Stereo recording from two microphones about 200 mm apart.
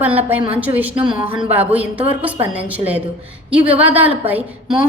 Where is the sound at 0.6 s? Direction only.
10° right (ahead or behind).